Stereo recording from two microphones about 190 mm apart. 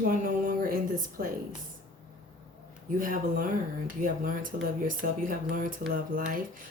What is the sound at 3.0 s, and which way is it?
Speech, 45° right (ahead or behind).